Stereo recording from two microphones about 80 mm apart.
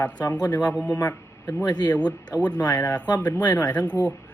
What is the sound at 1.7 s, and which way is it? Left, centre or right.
Speech, left.